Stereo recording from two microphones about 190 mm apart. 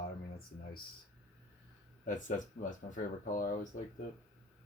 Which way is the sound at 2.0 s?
40° left (ahead or behind).